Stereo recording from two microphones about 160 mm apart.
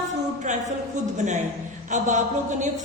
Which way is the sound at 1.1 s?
50° right (ahead or behind).